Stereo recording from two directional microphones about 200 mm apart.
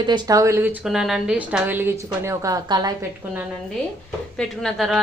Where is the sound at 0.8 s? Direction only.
5° right (ahead or behind); by 2.9 s 20° right (ahead or behind).